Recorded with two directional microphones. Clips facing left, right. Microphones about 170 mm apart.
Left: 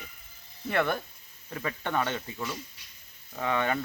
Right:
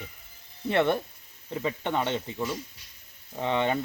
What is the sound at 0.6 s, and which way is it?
Speech, 25° right (ahead or behind).